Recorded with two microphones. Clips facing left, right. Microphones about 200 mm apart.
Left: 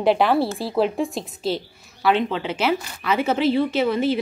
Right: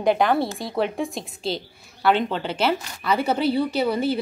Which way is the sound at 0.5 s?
30° left (ahead or behind).